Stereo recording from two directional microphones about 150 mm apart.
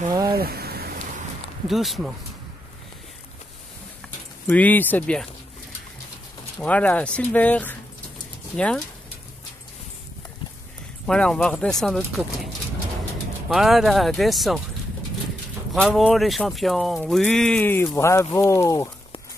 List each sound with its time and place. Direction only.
0.3 s rain: 90° right
1.7 s speech: centre (ahead or behind)
4.5 s speech: 10° left (ahead or behind)
6.6 s speech: 10° left (ahead or behind)
11.1 s speech: 5° left (ahead or behind)
13.5 s speech: centre (ahead or behind)
15.7 s speech: centre (ahead or behind); by 18.9 s 20° left (ahead or behind)